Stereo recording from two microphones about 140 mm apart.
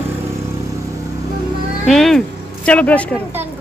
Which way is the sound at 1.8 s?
5° left (ahead or behind).